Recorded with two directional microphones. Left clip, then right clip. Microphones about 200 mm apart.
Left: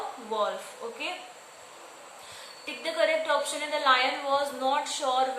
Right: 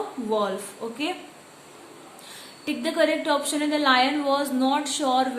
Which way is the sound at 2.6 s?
45° right (ahead or behind).